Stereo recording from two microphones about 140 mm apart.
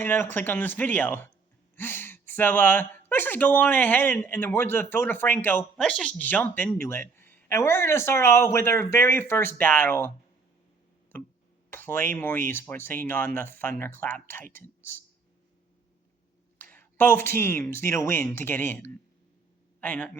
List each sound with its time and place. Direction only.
0.0 s speech: 15° left (ahead or behind)
11.7 s speech: 15° left (ahead or behind)
16.6 s speech: 15° left (ahead or behind)